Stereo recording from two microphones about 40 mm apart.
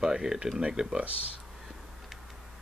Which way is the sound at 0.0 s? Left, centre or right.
Centre.